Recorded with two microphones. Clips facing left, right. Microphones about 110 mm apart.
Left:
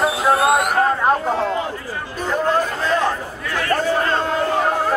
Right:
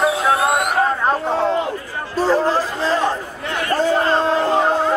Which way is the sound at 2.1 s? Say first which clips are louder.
Right 3 dB; 35° right (ahead or behind).